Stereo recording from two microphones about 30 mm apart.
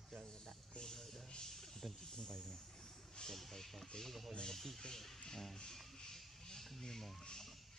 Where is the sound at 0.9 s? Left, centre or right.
Centre.